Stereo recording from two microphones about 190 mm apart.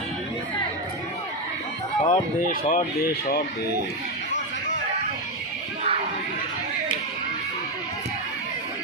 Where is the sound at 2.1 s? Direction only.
40° left (ahead or behind); by 3.4 s 55° left (ahead or behind).